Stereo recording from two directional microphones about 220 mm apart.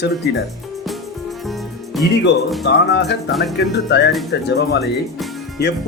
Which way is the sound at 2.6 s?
50° left (ahead or behind).